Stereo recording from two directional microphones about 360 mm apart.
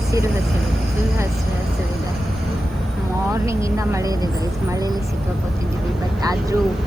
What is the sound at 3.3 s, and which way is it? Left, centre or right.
Speech, centre.